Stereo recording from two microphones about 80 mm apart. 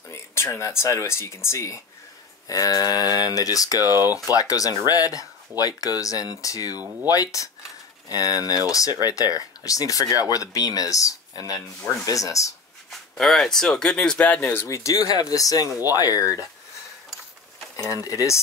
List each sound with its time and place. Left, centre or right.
0.1 s speech: left
2.4 s speech: left
13.2 s speech: centre
14.5 s speech: left